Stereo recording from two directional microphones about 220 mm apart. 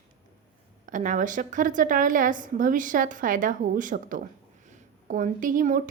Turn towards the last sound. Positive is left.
turn(degrees=-40)  # may be behind; listen again after turning